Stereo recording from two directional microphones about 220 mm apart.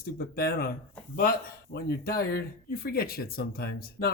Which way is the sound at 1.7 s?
45° left (ahead or behind).